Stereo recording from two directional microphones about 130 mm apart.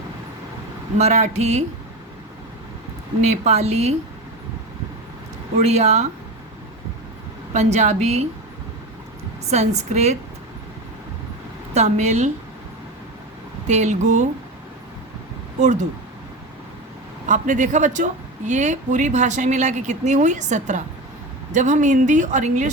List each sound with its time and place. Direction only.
0.9 s a woman's voice: 60° right (ahead or behind)
3.2 s a woman's voice: 55° right (ahead or behind)
5.5 s a woman's voice: 60° right (ahead or behind)
7.5 s a woman's voice: 60° right (ahead or behind)
9.5 s a woman's voice: 60° right (ahead or behind)
11.7 s a woman's voice: 60° right (ahead or behind)
13.7 s a woman's voice: 60° right (ahead or behind)
15.6 s a woman's voice: 65° right (ahead or behind)
17.2 s speech: 75° right (ahead or behind)